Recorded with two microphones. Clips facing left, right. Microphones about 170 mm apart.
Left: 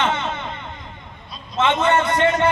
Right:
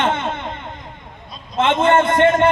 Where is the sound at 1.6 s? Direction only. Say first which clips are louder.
Right 3 dB; 50° right (ahead or behind).